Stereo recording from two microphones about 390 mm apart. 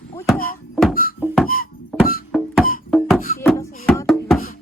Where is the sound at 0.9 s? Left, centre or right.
Left.